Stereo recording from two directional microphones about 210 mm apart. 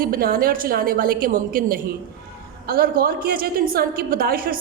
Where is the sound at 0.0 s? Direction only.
45° right (ahead or behind).